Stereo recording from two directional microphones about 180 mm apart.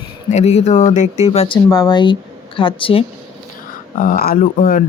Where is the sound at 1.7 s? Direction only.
20° left (ahead or behind).